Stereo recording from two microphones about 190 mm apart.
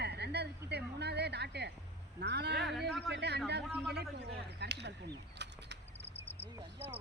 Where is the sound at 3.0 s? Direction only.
60° right (ahead or behind).